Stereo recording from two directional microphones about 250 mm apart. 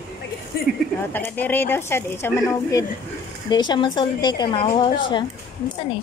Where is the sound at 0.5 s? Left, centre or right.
Left.